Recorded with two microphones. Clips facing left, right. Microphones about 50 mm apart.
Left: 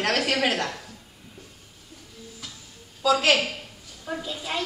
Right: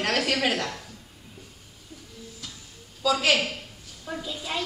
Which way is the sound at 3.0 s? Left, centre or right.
Centre.